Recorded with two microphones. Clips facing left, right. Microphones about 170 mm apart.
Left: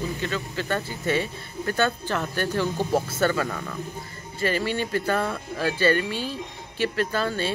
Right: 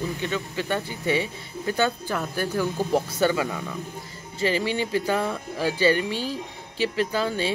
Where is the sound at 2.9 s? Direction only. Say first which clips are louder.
Right 1 dB; 15° right (ahead or behind).